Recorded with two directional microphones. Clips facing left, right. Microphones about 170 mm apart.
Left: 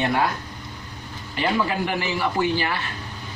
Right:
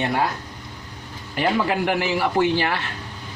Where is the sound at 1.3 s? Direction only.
65° right (ahead or behind).